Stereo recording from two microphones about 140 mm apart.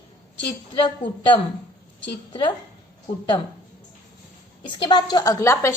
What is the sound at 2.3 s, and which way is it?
Speech, 35° left (ahead or behind).